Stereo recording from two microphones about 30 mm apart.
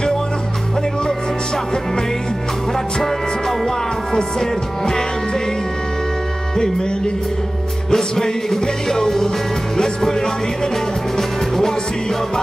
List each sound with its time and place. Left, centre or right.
3.0 s music: centre
6.5 s music: left
7.9 s music: centre